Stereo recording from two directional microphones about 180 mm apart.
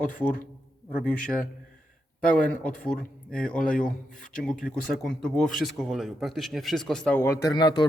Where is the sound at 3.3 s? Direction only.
5° left (ahead or behind).